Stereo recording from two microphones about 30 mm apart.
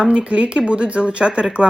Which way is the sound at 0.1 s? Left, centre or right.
Right.